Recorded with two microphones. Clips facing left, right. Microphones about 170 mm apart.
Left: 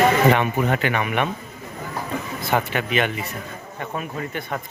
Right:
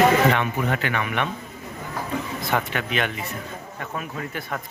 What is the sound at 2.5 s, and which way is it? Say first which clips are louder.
Speech: left 4 dB; 5° left (ahead or behind).